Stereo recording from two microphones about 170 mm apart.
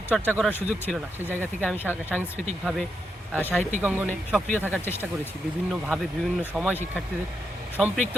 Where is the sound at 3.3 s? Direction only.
10° left (ahead or behind).